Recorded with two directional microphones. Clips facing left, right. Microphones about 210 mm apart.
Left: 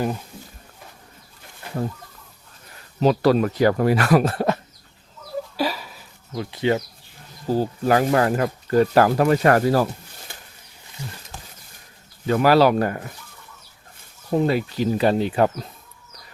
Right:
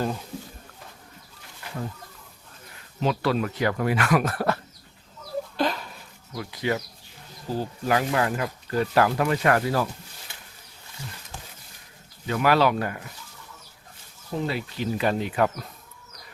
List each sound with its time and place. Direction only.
3.0 s speech: 40° left (ahead or behind); by 4.6 s 20° left (ahead or behind)
5.5 s a sound: 5° left (ahead or behind)
6.3 s speech: 25° left (ahead or behind)
7.5 s speech: 40° left (ahead or behind)
12.3 s speech: 35° left (ahead or behind)
14.3 s speech: 50° left (ahead or behind); by 15.6 s 30° left (ahead or behind)